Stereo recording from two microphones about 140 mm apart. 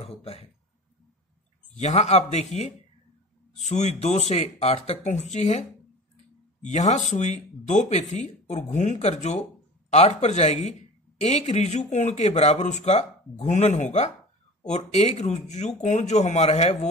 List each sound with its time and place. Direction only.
0.0 s speech: 45° left (ahead or behind)
1.7 s speech: 55° left (ahead or behind)